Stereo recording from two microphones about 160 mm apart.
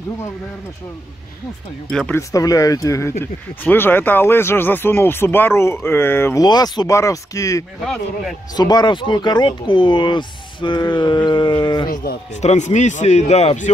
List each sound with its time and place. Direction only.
1.9 s speech: 5° left (ahead or behind)
2.1 s speech: 20° left (ahead or behind)
6.4 s speech: 25° left (ahead or behind)
7.8 s speech: 5° left (ahead or behind)
8.5 s speech: 25° left (ahead or behind)
11.9 s speech: 70° left (ahead or behind)
12.3 s speech: 45° left (ahead or behind)